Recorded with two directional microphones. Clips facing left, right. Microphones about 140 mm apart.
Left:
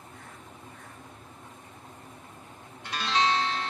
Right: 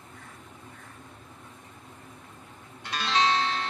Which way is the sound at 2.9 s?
90° right.